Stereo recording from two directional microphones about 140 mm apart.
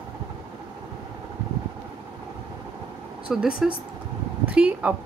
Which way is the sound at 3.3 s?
5° right (ahead or behind).